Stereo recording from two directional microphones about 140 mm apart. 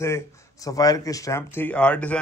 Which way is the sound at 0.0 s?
20° left (ahead or behind).